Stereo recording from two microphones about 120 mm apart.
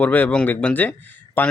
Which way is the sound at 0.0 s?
15° left (ahead or behind).